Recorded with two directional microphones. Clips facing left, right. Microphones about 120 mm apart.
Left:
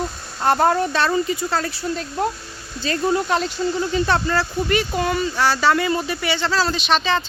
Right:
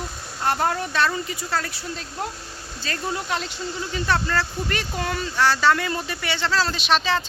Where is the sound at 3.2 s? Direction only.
40° left (ahead or behind).